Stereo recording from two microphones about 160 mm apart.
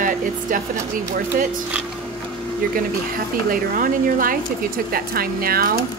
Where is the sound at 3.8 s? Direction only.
60° right (ahead or behind).